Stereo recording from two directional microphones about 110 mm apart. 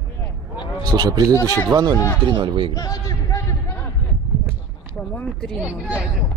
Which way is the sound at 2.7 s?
35° left (ahead or behind).